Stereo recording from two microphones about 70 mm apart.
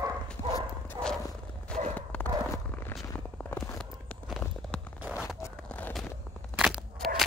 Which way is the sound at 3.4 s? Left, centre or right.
Left.